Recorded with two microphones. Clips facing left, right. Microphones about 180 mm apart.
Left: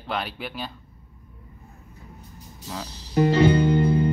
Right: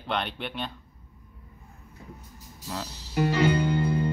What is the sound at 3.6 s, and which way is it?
Music, 20° left (ahead or behind).